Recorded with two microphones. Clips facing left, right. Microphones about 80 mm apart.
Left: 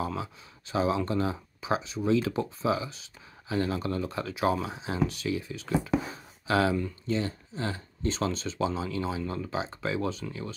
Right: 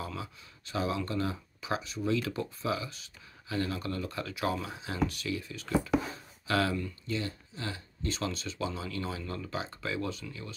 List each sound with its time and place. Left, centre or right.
0.0 s speech: left